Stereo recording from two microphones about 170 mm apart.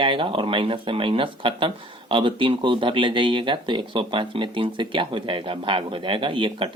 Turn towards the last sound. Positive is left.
turn(degrees=-30)  # may be behind; listen again after turning